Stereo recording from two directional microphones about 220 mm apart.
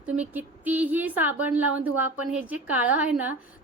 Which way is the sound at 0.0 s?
5° right (ahead or behind).